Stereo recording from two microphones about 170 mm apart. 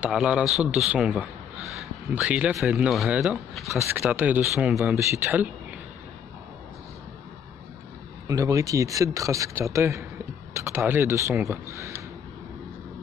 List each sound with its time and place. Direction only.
0.0 s speech: 5° right (ahead or behind)
8.3 s speech: 20° right (ahead or behind)